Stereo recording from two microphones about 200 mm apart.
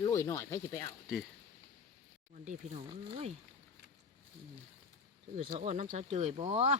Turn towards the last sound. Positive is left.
turn(degrees=-30)  # may be behind; listen again after turning